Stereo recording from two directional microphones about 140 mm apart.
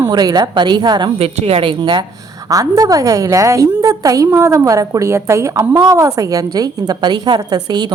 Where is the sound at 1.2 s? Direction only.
45° right (ahead or behind).